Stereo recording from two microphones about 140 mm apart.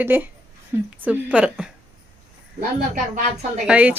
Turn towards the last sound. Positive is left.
turn(degrees=-10)  # may be behind; listen again after turning